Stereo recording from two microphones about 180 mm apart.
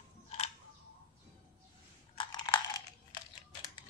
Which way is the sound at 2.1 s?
25° left (ahead or behind).